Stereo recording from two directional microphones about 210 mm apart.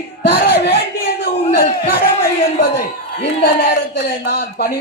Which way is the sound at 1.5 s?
45° left (ahead or behind).